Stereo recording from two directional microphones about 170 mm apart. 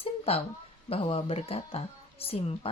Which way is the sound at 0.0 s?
35° left (ahead or behind).